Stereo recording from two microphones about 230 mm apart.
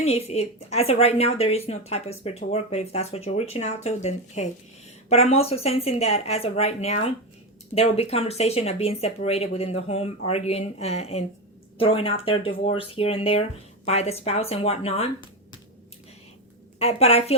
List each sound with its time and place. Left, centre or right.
0.0 s speech: left
16.8 s speech: left